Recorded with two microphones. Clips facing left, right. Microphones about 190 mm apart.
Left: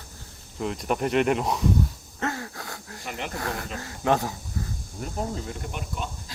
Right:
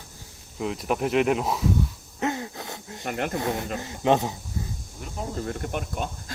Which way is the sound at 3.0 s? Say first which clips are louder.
Right 6 dB; 50° right (ahead or behind).